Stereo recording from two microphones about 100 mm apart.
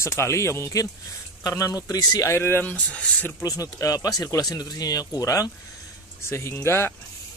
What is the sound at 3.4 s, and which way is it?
Speech, 35° left (ahead or behind).